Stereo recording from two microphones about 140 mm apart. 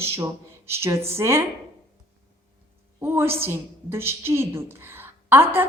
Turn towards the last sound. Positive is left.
turn(degrees=-15)  # may be behind; listen again after turning